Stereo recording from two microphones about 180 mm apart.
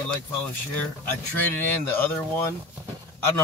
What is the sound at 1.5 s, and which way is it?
Speech, 10° left (ahead or behind).